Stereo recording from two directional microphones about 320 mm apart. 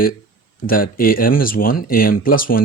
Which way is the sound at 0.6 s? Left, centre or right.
Left.